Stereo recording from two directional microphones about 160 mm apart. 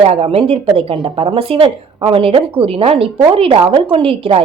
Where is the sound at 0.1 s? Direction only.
35° right (ahead or behind).